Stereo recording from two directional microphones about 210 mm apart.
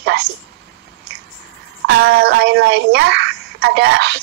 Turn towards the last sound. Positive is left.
turn(degrees=-55)  # may be behind; listen again after turning